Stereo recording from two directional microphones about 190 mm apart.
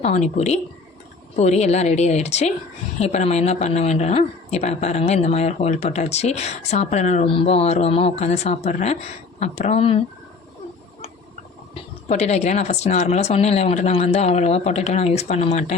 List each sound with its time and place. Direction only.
0.0 s speech: 35° left (ahead or behind)
11.7 s speech: 35° left (ahead or behind)